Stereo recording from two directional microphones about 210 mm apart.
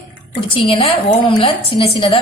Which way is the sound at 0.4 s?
25° left (ahead or behind).